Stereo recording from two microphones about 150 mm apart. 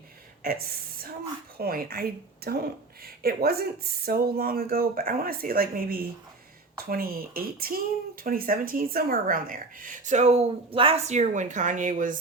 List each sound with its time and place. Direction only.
0.4 s a woman's voice: 90° right; by 12.1 s 60° right (ahead or behind)